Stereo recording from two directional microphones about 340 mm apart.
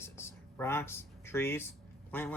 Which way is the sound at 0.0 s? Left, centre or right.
Centre.